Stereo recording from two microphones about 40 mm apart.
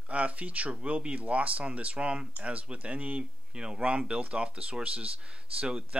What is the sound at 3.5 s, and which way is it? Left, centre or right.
Speech, right.